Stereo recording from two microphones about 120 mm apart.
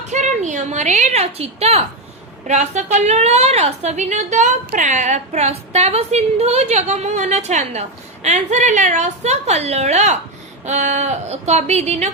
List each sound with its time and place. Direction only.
0.1 s a woman's voice: 85° right; by 1.8 s 60° right (ahead or behind)
2.5 s a woman's voice: 75° right (ahead or behind)
10.7 s a woman's voice: 80° right